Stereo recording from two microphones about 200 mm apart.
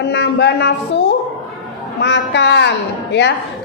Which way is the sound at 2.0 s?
60° left (ahead or behind).